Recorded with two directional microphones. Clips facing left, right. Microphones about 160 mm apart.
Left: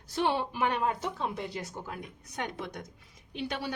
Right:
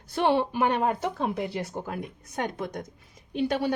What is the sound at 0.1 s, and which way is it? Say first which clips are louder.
A woman's voice: right 6 dB; 55° right (ahead or behind).